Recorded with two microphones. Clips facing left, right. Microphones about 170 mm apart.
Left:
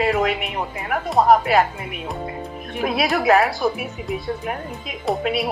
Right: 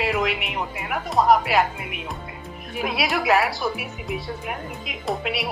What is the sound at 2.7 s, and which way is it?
Speech, centre (ahead or behind).